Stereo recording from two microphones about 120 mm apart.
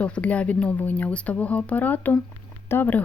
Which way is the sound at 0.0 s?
10° left (ahead or behind).